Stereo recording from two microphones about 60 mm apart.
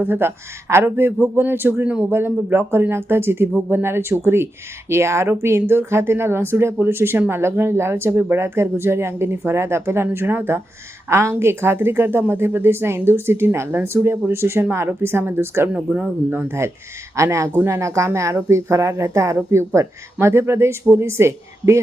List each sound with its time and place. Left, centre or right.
0.0 s a woman's voice: right
1.8 s speech: right
2.0 s a woman's voice: right
11.1 s a woman's voice: right
15.7 s speech: right
16.3 s speech: right
17.2 s speech: right